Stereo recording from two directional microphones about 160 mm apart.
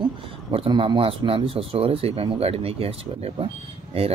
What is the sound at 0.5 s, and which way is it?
Speech, 35° right (ahead or behind).